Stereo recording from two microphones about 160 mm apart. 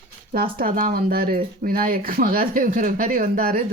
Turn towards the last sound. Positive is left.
turn(degrees=-65)  # may be behind; listen again after turning